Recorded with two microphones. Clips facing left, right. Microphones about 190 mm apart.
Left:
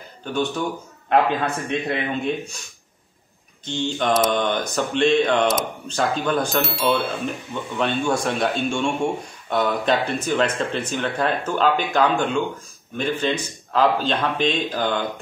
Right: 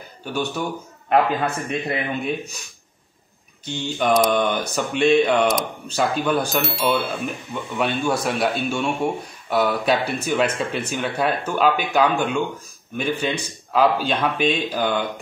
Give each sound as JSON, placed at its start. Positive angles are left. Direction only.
{"t": 0.2, "sound": "speech", "side_deg": -10}
{"t": 3.6, "sound": "speech", "side_deg": -10}